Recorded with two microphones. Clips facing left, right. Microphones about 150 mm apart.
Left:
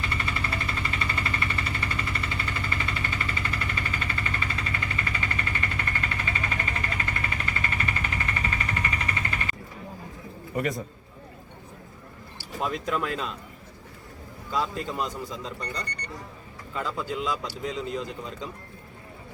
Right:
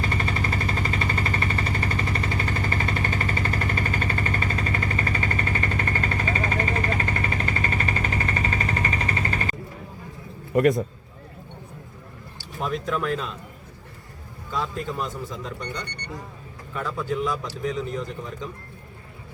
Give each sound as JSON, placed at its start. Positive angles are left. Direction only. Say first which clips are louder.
{"t": 0.0, "sound": "a sound", "louder": "right 5 dB", "side_deg": -40}
{"t": 10.5, "sound": "a man's voice", "louder": "right 9 dB", "side_deg": -65}
{"t": 12.5, "sound": "speech", "louder": "right 1 dB", "side_deg": 15}
{"t": 14.5, "sound": "speech", "louder": "even", "side_deg": 15}
{"t": 16.7, "sound": "speech", "louder": "right 3 dB", "side_deg": 15}